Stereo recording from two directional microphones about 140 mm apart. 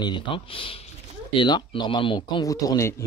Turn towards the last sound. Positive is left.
turn(degrees=20)  # may be behind; listen again after turning